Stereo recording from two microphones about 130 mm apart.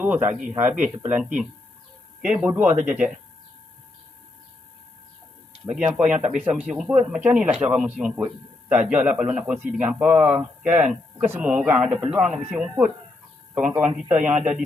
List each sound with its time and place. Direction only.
0.0 s a man's voice: 15° right (ahead or behind)
5.6 s a man's voice: 5° right (ahead or behind)